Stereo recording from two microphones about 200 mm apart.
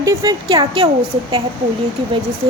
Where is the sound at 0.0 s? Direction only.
15° right (ahead or behind).